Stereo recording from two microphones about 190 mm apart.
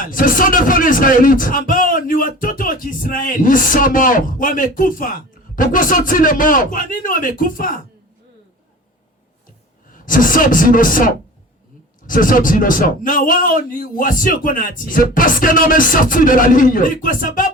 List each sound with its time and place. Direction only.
0.0 s a man's voice: 45° left (ahead or behind)
9.9 s a man's voice: 45° left (ahead or behind)